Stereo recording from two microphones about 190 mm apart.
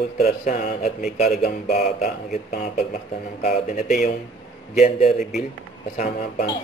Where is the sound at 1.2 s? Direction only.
55° left (ahead or behind).